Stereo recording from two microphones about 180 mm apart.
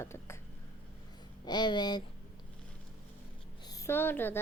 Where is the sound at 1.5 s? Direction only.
25° left (ahead or behind).